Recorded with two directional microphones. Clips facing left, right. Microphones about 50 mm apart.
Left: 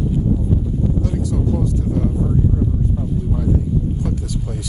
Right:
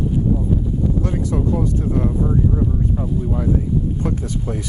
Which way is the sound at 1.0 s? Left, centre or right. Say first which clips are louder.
Right 1 dB; right.